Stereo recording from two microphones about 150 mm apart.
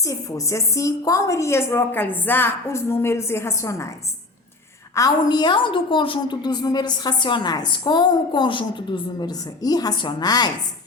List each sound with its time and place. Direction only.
0.0 s a woman's voice: 20° left (ahead or behind)
4.9 s a woman's voice: 25° left (ahead or behind)